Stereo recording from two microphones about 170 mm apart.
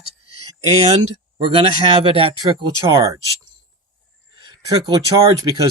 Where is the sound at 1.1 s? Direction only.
30° right (ahead or behind).